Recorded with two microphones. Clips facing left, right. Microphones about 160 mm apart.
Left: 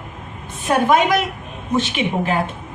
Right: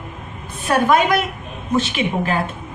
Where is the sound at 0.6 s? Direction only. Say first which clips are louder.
Even; 20° left (ahead or behind).